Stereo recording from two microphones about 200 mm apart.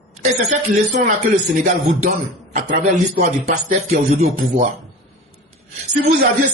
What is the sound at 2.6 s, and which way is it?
A man's voice, 40° right (ahead or behind).